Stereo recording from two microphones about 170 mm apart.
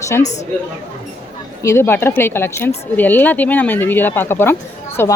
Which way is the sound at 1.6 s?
15° left (ahead or behind).